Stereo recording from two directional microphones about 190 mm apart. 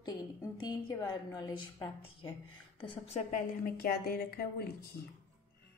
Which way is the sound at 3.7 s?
50° left (ahead or behind).